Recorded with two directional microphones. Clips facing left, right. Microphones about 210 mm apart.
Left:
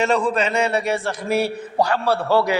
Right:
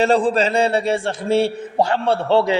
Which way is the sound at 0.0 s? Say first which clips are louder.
Right 3 dB; 30° right (ahead or behind).